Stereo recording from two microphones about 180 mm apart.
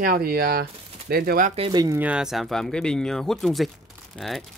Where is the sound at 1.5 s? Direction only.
25° right (ahead or behind).